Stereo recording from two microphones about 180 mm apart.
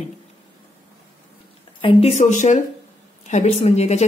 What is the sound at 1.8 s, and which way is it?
A woman's voice, 30° left (ahead or behind).